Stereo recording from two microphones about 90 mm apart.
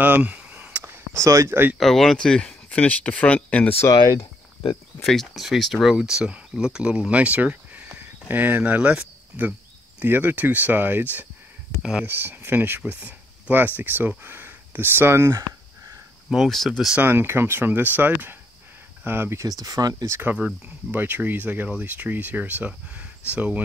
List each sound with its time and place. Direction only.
0.0 s a sound: 20° right (ahead or behind); by 1.6 s 35° right (ahead or behind)
1.8 s speech: 5° left (ahead or behind)
4.0 s a sound: 90° left
5.0 s speech: centre (ahead or behind); by 11.1 s 20° right (ahead or behind)
11.8 s speech: 10° right (ahead or behind)
12.1 s speech: 25° right (ahead or behind)
16.3 s speech: centre (ahead or behind)
17.0 s speech: 25° right (ahead or behind)
19.4 s speech: 40° right (ahead or behind)
20.1 s speech: 20° right (ahead or behind)